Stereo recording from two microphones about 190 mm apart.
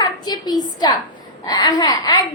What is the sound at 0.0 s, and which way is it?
A woman's voice, 20° left (ahead or behind).